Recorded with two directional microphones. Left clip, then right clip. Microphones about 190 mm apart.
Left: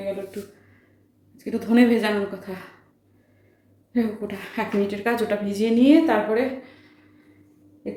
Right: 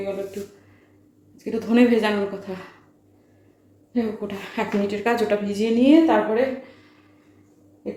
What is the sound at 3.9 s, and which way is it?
Speech, centre (ahead or behind).